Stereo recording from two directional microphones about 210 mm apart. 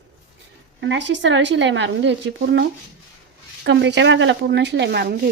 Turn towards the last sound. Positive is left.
turn(degrees=-50)  # may be behind; listen again after turning